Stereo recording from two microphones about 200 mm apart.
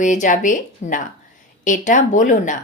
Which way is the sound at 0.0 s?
40° left (ahead or behind).